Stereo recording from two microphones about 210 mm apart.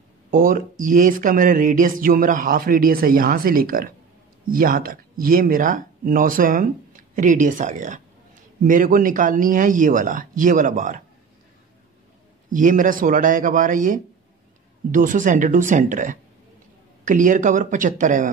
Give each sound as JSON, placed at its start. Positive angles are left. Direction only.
{"t": 0.3, "sound": "speech", "side_deg": -40}
{"t": 12.5, "sound": "speech", "side_deg": -40}